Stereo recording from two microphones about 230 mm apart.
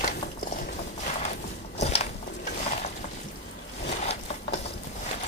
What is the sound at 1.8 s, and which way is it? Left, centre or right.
Walk, left.